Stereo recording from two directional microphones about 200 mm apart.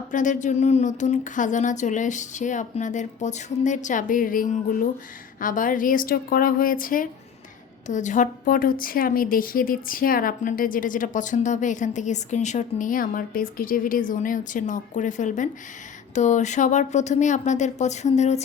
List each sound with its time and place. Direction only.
0.1 s a woman's voice: 40° left (ahead or behind)